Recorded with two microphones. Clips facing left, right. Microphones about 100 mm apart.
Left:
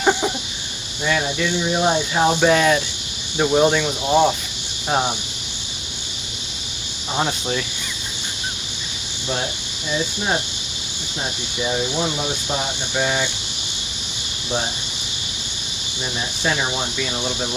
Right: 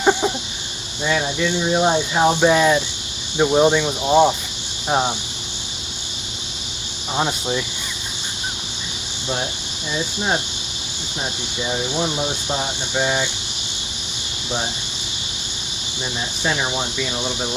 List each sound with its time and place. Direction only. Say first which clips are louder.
0.0 s a sound: right 1 dB; 15° right (ahead or behind)
1.0 s speech: right 1 dB; 15° right (ahead or behind)
7.2 s speech: right 1 dB; 15° right (ahead or behind)
12.0 s speech: right 1 dB; 20° right (ahead or behind)
16.4 s speech: even; 15° right (ahead or behind)